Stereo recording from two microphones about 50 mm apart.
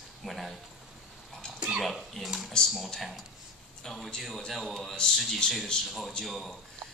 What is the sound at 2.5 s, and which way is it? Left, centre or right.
Speech, centre.